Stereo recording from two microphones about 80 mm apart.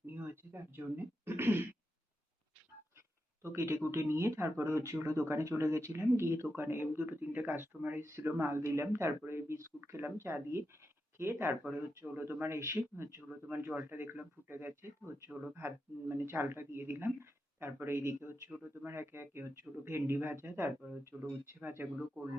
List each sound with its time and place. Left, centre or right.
0.1 s speech: right
3.4 s speech: right
4.6 s speech: right
8.0 s speech: right